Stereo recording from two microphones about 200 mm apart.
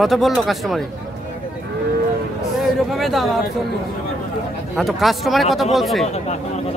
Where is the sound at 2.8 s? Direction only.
Centre (ahead or behind).